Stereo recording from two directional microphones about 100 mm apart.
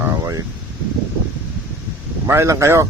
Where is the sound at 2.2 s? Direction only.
30° right (ahead or behind).